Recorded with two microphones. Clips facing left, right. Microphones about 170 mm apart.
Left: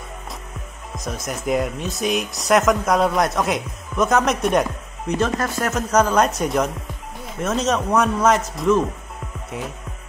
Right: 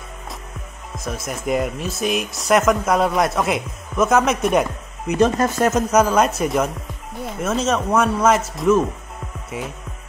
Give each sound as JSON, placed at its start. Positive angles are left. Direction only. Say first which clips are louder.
{"t": 0.9, "sound": "speech", "louder": "right 1 dB", "side_deg": 0}
{"t": 5.2, "sound": "speech", "louder": "right 7 dB", "side_deg": -20}
{"t": 5.9, "sound": "speech", "louder": "right 1 dB", "side_deg": -5}